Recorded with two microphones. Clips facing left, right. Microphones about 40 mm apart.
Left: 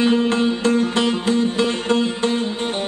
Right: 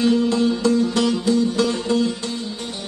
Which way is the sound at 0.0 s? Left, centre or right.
Left.